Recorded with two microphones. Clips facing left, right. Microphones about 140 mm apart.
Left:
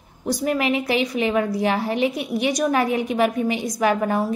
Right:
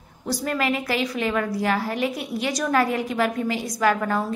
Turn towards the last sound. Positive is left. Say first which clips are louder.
# left 2 dB
turn(degrees=20)  # may be behind; listen again after turning